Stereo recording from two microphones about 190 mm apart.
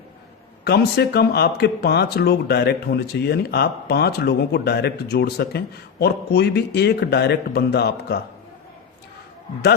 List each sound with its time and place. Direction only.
0.6 s speech: 55° left (ahead or behind)